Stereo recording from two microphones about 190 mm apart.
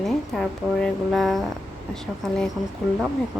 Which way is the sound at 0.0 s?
Centre (ahead or behind).